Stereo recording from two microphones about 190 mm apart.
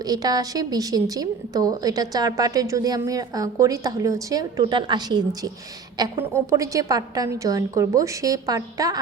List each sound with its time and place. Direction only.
0.0 s a woman's voice: 20° right (ahead or behind)